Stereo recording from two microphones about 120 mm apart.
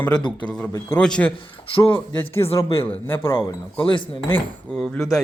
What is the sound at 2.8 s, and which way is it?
Speech, 15° left (ahead or behind).